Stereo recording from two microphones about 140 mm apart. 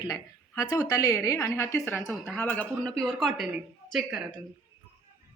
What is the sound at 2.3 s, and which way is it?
A man's voice, 10° left (ahead or behind).